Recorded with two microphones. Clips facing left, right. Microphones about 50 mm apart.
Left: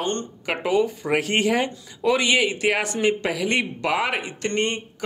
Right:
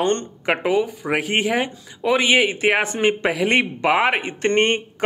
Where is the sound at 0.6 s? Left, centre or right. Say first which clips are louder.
Left 3 dB; centre.